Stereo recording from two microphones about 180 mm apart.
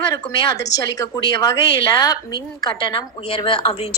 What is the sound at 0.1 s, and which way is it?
A woman's voice, 20° left (ahead or behind).